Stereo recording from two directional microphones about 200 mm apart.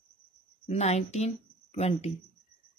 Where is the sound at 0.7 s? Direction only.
35° left (ahead or behind).